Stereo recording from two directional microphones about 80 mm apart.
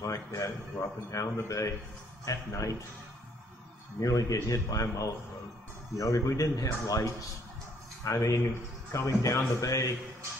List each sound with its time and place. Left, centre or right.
0.0 s a sound: left
1.1 s a man's voice: left
4.0 s a man's voice: left